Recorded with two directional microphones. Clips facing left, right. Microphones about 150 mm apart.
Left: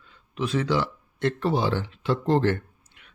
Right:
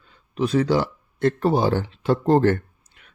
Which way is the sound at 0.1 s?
40° right (ahead or behind).